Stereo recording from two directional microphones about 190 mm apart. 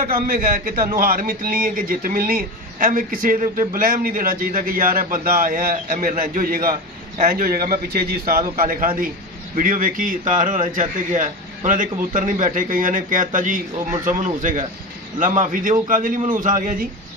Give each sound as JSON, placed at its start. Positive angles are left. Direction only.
{"t": 0.0, "sound": "speech", "side_deg": -50}